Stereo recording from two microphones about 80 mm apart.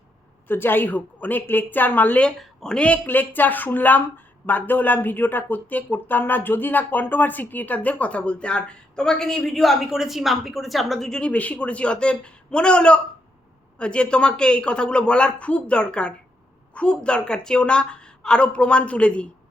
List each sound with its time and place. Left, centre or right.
0.4 s a woman's voice: left
2.4 s speech: centre